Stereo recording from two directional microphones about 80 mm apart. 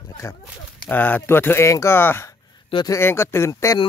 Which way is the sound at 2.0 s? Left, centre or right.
Left.